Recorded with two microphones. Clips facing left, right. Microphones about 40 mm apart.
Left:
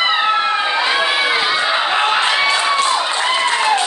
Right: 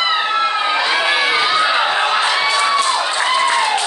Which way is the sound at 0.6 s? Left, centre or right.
Centre.